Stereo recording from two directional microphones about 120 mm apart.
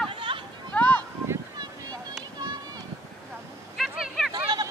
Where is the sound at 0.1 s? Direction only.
45° right (ahead or behind).